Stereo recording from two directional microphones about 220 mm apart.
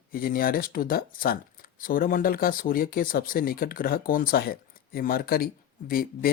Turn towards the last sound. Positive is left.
turn(degrees=40)  # may be behind; listen again after turning